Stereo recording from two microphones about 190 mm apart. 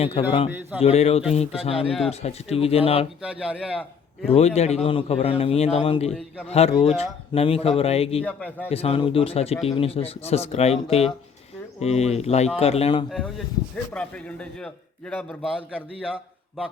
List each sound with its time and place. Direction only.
0.0 s a man's voice: 25° left (ahead or behind)
1.7 s speech: centre (ahead or behind)
2.0 s a man's voice: 35° left (ahead or behind)
3.2 s speech: 5° right (ahead or behind)
4.3 s a man's voice: 35° left (ahead or behind)
6.1 s speech: centre (ahead or behind)
6.5 s a man's voice: 30° left (ahead or behind)
8.2 s a man's voice: 5° left (ahead or behind)
8.7 s a man's voice: 30° left (ahead or behind)
13.1 s a man's voice: centre (ahead or behind)
16.0 s a man's voice: 5° right (ahead or behind)